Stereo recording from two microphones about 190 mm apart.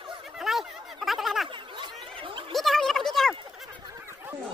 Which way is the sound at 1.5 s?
25° right (ahead or behind).